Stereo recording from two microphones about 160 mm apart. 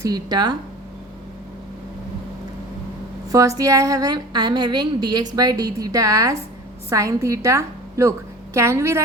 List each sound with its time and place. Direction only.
0.0 s a woman's voice: 25° right (ahead or behind)
3.6 s a woman's voice: 20° right (ahead or behind)